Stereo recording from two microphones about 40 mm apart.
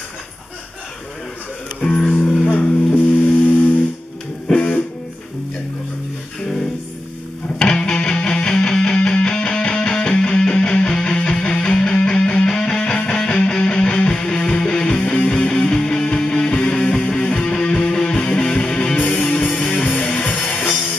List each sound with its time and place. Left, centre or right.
1.8 s music: left
7.6 s music: left